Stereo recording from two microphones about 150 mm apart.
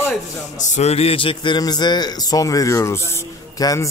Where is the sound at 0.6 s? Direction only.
50° left (ahead or behind); by 3.8 s 20° left (ahead or behind).